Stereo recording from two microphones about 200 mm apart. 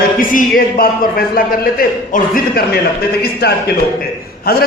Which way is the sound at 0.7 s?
45° left (ahead or behind).